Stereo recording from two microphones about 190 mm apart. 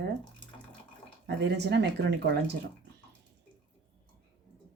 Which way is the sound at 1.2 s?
60° right (ahead or behind).